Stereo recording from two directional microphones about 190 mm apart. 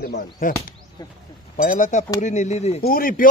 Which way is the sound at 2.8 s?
50° left (ahead or behind).